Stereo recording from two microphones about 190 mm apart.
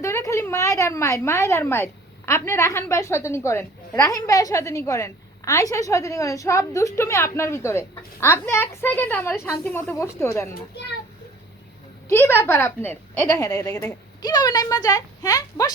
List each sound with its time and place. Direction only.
0.0 s a woman's voice: 15° left (ahead or behind)
12.0 s a woman's voice: 10° left (ahead or behind)